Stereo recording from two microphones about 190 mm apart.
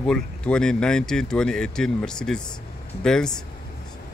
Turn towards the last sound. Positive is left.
turn(degrees=5)  # may be behind; listen again after turning